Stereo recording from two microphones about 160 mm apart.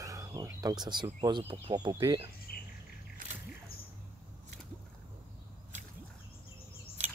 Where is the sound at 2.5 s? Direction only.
70° left (ahead or behind).